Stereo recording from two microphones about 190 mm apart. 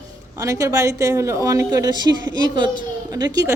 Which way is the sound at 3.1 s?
20° right (ahead or behind).